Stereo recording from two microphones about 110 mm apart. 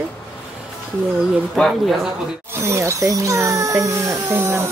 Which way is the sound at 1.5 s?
Centre (ahead or behind).